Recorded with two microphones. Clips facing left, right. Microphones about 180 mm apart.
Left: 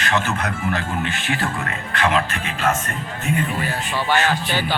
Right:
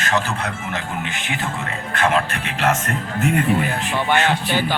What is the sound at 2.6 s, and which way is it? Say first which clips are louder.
Speech: right 2 dB; 80° right.